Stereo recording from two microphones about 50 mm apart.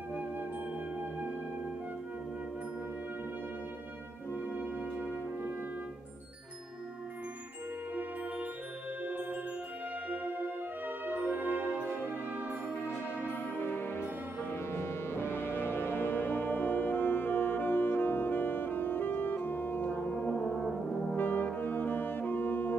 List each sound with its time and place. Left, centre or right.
0.1 s music: right
9.0 s music: right
12.7 s music: left
20.6 s brass instrument: centre
21.2 s brass instrument: left
21.5 s music: left